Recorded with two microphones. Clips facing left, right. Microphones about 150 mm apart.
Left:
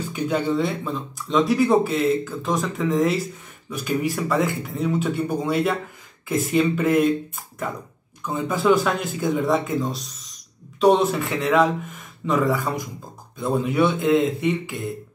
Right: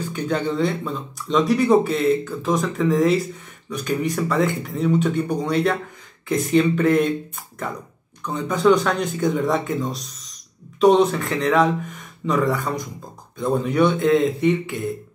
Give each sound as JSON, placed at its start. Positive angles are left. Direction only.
{"t": 0.1, "sound": "speech", "side_deg": 5}
{"t": 8.2, "sound": "speech", "side_deg": 5}